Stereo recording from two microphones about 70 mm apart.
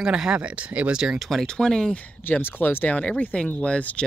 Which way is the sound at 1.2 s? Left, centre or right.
Centre.